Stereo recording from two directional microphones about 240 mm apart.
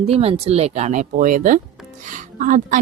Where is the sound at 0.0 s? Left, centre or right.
Right.